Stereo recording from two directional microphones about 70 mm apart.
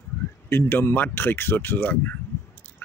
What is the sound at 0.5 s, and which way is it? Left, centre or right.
Speech, left.